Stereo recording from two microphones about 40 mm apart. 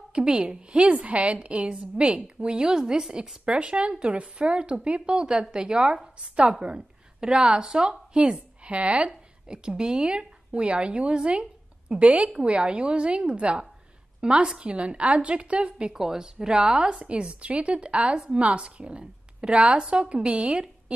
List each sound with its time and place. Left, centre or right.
0.1 s a woman's voice: right
2.6 s a woman's voice: centre
8.6 s a woman's voice: right
15.9 s a woman's voice: centre; by 20.6 s right